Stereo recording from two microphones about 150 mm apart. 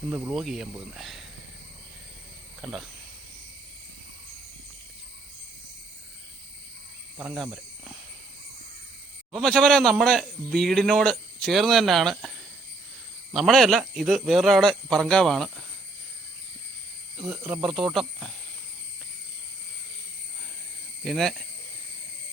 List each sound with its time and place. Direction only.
0.1 s a man's voice: 5° right (ahead or behind)
2.6 s speech: centre (ahead or behind)
7.2 s speech: 5° right (ahead or behind)
9.3 s a man's voice: 5° left (ahead or behind)
13.3 s a man's voice: centre (ahead or behind)
17.2 s a man's voice: centre (ahead or behind)
21.0 s a man's voice: centre (ahead or behind)